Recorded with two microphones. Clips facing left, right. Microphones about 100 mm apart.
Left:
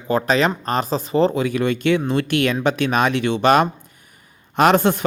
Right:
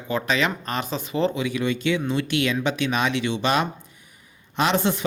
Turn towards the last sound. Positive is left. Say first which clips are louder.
# left 7 dB
turn(degrees=55)  # may be behind; listen again after turning